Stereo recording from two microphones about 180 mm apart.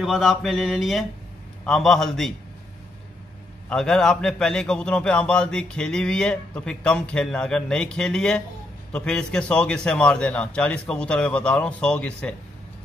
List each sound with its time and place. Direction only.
0.0 s a man's voice: centre (ahead or behind)
3.6 s a man's voice: 5° left (ahead or behind)